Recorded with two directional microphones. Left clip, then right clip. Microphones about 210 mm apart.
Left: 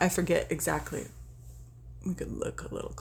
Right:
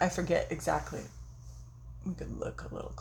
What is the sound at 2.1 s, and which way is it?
Speech, 40° left (ahead or behind).